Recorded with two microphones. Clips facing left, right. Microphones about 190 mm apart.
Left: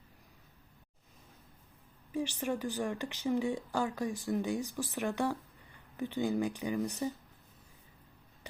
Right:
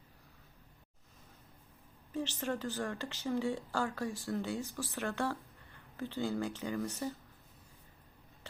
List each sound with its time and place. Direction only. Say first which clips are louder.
2.1 s speech: left 2 dB; 10° left (ahead or behind)